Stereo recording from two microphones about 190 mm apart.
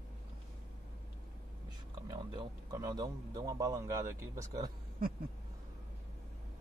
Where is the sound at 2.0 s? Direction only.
20° right (ahead or behind).